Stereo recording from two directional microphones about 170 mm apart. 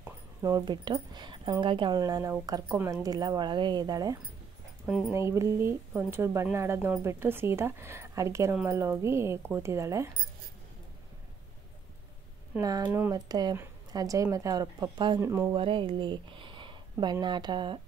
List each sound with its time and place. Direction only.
0.4 s speech: 20° right (ahead or behind)
4.8 s speech: 5° right (ahead or behind)
5.1 s speech: 15° right (ahead or behind)
12.5 s speech: 20° right (ahead or behind)
15.5 s speech: 30° right (ahead or behind)